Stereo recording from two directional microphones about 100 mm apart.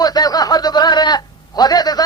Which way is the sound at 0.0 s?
40° left (ahead or behind).